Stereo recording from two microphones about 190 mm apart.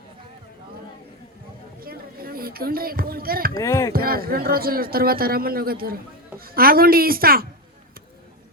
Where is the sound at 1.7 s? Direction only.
50° right (ahead or behind).